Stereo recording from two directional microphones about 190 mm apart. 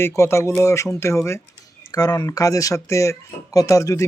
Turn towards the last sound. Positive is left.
turn(degrees=15)  # may be behind; listen again after turning